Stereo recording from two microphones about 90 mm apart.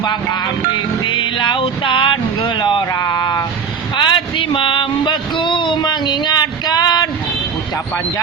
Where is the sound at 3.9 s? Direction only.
60° left (ahead or behind).